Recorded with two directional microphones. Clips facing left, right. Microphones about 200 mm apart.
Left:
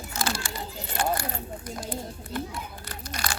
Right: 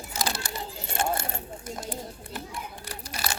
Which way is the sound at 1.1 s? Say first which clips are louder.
Left 2 dB; 25° right (ahead or behind).